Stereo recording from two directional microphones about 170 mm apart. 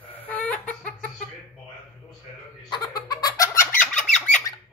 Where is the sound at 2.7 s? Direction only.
25° left (ahead or behind).